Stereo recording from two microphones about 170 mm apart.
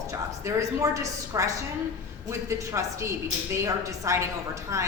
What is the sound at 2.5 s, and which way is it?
A woman's voice, 15° right (ahead or behind).